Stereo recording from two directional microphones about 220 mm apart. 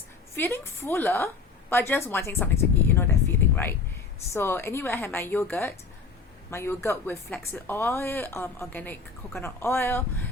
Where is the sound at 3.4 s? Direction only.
10° left (ahead or behind).